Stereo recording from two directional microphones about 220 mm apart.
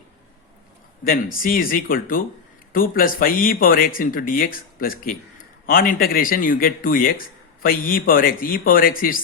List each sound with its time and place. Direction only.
1.0 s speech: 40° left (ahead or behind)